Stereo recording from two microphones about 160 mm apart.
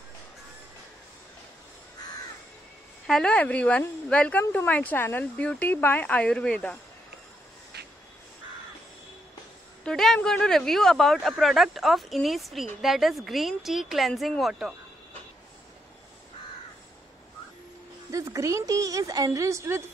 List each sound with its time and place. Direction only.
3.1 s a woman's voice: 5° left (ahead or behind)
7.7 s duck: 90° right
9.8 s speech: 5° left (ahead or behind)
18.1 s a woman's voice: 20° right (ahead or behind)